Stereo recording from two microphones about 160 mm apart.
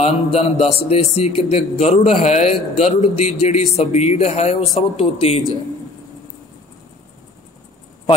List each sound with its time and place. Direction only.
0.0 s speech: 40° left (ahead or behind)